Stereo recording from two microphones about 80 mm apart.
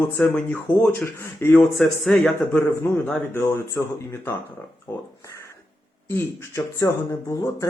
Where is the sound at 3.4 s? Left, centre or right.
Left.